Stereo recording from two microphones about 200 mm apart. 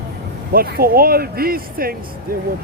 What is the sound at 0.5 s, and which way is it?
Speech, 50° right (ahead or behind).